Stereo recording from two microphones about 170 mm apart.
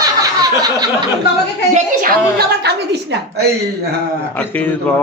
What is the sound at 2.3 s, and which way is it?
A woman's voice, 75° right (ahead or behind).